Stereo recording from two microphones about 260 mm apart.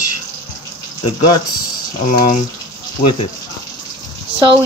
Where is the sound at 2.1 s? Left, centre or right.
Left.